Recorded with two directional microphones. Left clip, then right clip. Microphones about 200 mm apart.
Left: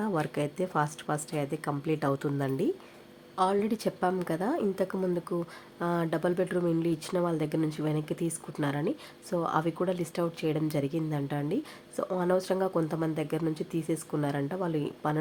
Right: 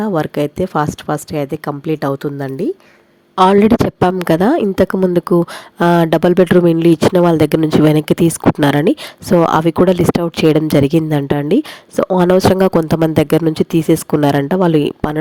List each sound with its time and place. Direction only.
0.0 s a woman's voice: 35° right (ahead or behind)
3.3 s a woman's voice: 45° right (ahead or behind)